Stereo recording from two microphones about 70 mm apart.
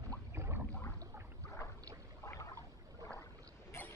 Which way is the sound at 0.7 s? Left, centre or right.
Left.